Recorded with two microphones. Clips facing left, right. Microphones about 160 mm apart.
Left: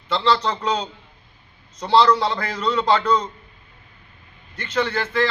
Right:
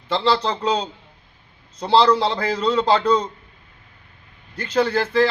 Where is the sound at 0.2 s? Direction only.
30° right (ahead or behind).